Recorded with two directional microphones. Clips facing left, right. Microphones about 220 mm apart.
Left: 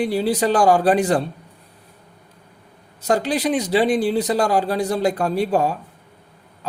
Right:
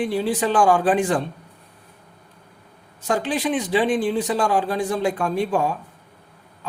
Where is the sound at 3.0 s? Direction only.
40° left (ahead or behind).